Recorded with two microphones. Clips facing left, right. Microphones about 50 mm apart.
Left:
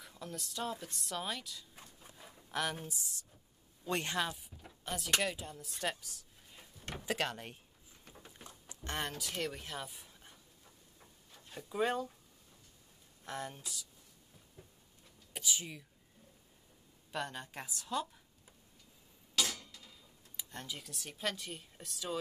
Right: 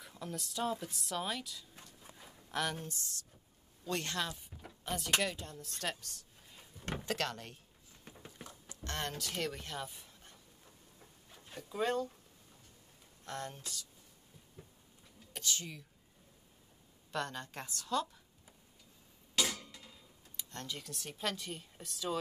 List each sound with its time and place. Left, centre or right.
0.0 s a woman's voice: centre
4.8 s a woman's voice: centre
8.5 s a sound: centre
9.1 s a woman's voice: centre
11.7 s a woman's voice: centre
13.2 s a woman's voice: centre
15.3 s speech: centre
17.1 s a woman's voice: centre
19.3 s a sound: centre
19.6 s a sound: centre
20.3 s speech: centre